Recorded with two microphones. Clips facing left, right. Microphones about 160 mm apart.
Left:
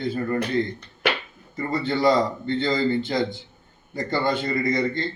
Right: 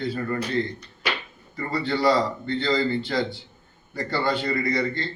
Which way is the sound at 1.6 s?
20° left (ahead or behind).